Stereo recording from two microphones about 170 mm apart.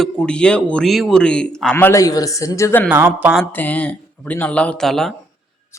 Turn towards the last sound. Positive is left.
turn(degrees=0)  # may be behind; listen again after turning